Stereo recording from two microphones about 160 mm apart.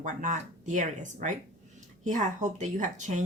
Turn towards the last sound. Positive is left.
turn(degrees=-50)  # may be behind; listen again after turning